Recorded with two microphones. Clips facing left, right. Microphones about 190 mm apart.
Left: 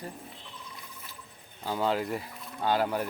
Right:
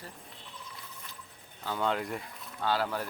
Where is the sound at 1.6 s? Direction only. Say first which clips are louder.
Left 3 dB; 10° left (ahead or behind).